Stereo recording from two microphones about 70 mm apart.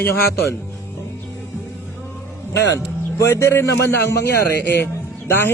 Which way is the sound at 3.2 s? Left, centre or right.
Left.